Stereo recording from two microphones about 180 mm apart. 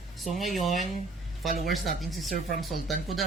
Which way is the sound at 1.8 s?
50° right (ahead or behind).